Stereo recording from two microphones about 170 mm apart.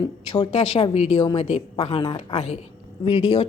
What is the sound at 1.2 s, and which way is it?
Speech, 25° left (ahead or behind).